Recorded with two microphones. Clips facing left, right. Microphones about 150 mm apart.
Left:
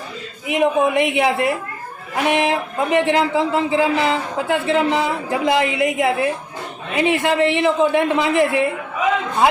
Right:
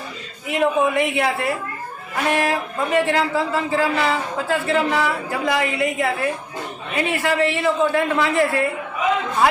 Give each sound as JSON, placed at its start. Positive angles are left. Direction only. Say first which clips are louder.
{"t": 0.4, "sound": "speech", "louder": "left 2 dB", "side_deg": 20}